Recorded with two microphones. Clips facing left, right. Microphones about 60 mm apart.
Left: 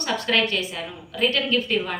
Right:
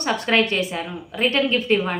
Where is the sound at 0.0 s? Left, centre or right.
Right.